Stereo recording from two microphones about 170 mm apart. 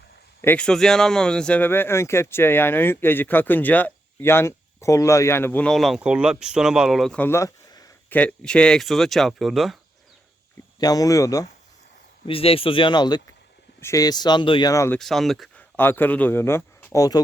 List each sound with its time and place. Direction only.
0.4 s speech: 5° left (ahead or behind)
8.1 s speech: 5° left (ahead or behind)
10.8 s speech: 20° left (ahead or behind)
12.2 s speech: 35° left (ahead or behind)
14.7 s speech: 20° left (ahead or behind)
14.9 s speech: centre (ahead or behind); by 17.2 s 20° left (ahead or behind)